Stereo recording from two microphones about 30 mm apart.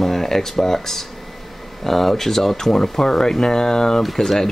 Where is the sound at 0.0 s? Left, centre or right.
Centre.